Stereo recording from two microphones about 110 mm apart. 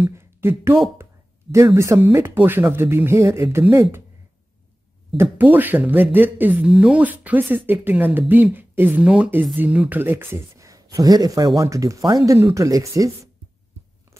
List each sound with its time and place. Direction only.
0.0 s speech: 20° right (ahead or behind)
5.1 s speech: 20° right (ahead or behind)